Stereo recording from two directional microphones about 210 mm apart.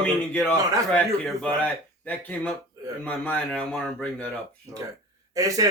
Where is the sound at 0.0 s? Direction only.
5° left (ahead or behind).